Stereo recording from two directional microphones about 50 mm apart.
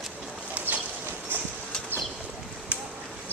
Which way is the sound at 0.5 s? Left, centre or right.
Right.